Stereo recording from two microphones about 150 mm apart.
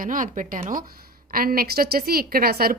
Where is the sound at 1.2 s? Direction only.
80° right.